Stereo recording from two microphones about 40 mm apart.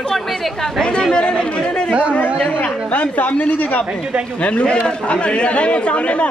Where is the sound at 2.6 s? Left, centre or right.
Left.